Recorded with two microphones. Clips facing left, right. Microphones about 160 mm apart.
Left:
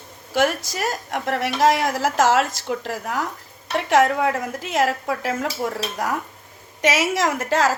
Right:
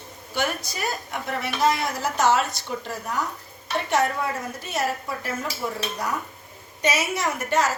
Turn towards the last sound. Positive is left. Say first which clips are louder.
# left 4 dB
turn(degrees=90)